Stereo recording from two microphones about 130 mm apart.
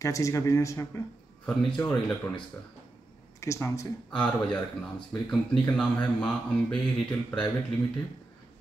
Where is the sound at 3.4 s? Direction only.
25° left (ahead or behind).